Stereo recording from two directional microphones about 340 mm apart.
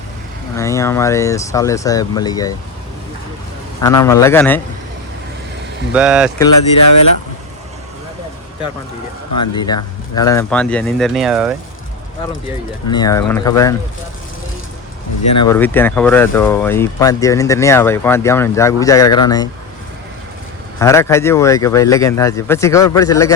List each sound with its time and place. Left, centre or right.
0.5 s speech: centre
3.8 s speech: centre
5.9 s speech: centre
6.5 s speech: left
9.6 s speech: centre
12.9 s speech: centre
15.4 s speech: centre
20.7 s speech: centre